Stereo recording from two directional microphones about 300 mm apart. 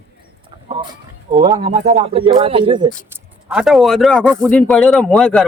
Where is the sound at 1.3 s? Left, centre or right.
Centre.